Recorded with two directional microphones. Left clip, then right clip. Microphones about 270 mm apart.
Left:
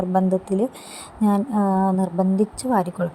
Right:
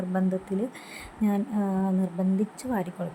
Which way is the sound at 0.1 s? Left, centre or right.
Centre.